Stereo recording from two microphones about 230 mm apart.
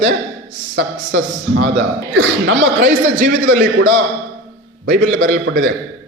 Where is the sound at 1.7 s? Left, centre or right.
Right.